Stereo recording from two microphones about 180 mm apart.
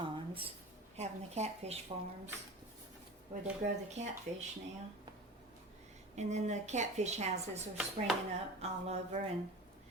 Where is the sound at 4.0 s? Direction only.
40° right (ahead or behind).